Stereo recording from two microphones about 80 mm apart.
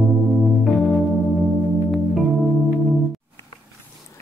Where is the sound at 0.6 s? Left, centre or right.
Centre.